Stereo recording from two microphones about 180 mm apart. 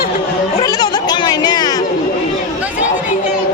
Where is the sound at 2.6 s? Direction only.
10° right (ahead or behind).